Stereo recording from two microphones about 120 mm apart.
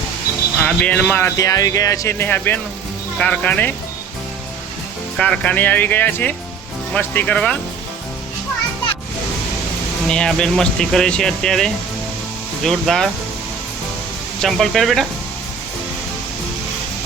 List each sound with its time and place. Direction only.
0.6 s speech: 10° left (ahead or behind)
1.4 s speech: 30° left (ahead or behind); by 3.8 s 15° left (ahead or behind)
5.1 s speech: 5° left (ahead or behind)
10.1 s speech: 5° left (ahead or behind)
14.4 s speech: centre (ahead or behind)